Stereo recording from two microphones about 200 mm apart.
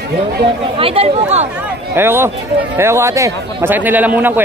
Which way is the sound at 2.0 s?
10° right (ahead or behind).